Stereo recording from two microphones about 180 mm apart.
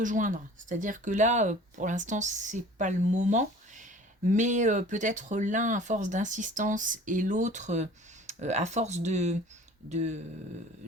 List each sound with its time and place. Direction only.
0.0 s speech: 45° right (ahead or behind)